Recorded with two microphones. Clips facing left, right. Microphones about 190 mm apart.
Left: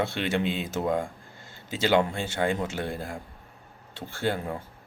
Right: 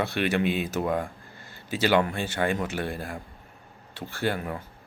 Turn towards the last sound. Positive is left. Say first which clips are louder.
# even
turn(degrees=20)  # may be behind; listen again after turning